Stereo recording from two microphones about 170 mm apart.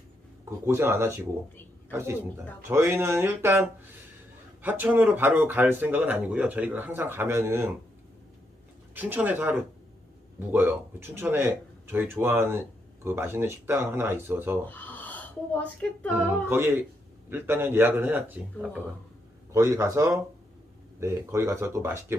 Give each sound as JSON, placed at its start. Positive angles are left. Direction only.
{"t": 0.6, "sound": "speech", "side_deg": -15}
{"t": 9.0, "sound": "speech", "side_deg": -10}
{"t": 14.7, "sound": "a sound", "side_deg": 10}
{"t": 17.2, "sound": "speech", "side_deg": -15}